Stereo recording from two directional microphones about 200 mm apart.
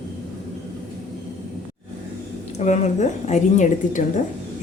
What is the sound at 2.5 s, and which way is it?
A woman's voice, 35° left (ahead or behind).